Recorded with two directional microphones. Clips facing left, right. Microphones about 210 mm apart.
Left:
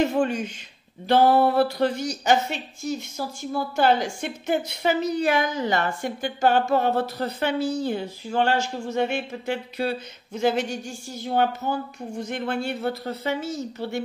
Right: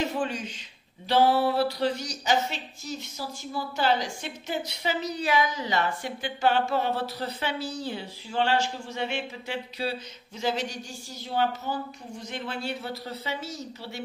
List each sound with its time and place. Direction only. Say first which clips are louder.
0.0 s a man's voice: left 7 dB; 55° left (ahead or behind)